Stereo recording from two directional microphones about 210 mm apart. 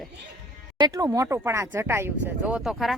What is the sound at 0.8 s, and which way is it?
Speech, 15° right (ahead or behind).